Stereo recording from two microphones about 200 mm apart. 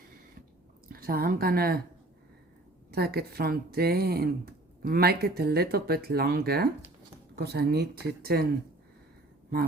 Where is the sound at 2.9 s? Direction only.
50° right (ahead or behind).